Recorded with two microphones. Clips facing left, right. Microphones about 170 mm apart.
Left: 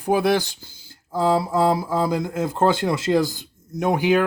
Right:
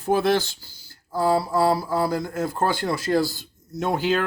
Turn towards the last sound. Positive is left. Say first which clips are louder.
# left 4 dB
turn(degrees=15)  # may be behind; listen again after turning